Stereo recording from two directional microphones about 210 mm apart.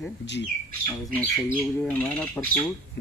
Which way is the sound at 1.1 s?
5° left (ahead or behind).